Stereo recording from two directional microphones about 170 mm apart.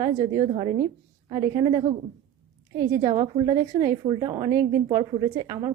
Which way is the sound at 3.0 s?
25° right (ahead or behind).